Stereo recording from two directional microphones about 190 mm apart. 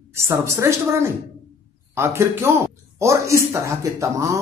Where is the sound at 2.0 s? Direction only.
15° right (ahead or behind).